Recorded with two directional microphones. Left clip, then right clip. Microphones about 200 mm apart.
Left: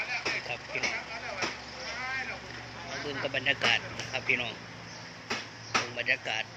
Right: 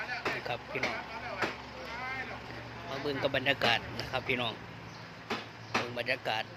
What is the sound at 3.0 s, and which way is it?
Speech, 25° right (ahead or behind).